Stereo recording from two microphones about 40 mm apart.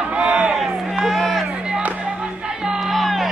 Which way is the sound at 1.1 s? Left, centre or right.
Centre.